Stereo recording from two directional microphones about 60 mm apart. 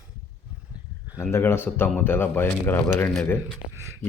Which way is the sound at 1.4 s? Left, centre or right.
Left.